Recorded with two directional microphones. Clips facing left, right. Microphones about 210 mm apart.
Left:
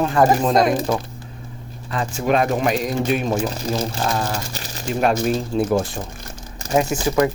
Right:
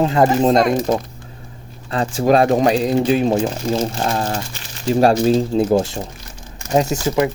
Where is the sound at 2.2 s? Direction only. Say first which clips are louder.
Right 5 dB; 35° right (ahead or behind).